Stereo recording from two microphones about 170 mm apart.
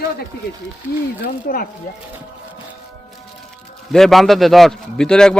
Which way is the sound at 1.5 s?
70° left (ahead or behind).